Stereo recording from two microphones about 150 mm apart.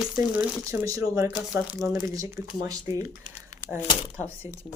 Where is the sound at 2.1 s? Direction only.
20° right (ahead or behind).